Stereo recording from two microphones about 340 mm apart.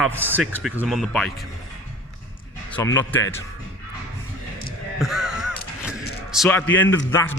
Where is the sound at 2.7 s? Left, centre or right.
Centre.